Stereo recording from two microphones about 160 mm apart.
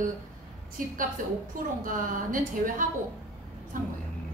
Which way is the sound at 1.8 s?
55° right (ahead or behind).